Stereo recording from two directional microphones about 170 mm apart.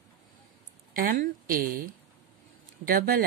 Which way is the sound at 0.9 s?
55° right (ahead or behind).